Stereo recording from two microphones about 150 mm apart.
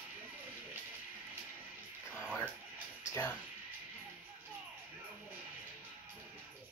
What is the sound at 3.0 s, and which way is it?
Music, 20° left (ahead or behind).